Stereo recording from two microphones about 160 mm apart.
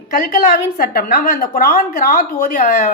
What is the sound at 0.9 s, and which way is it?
A woman's voice, 70° left (ahead or behind).